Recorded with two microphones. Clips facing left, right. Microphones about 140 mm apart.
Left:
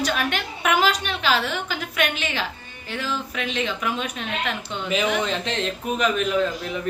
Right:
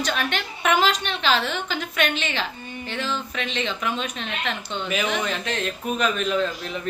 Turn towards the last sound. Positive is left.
turn(degrees=15)  # may be behind; listen again after turning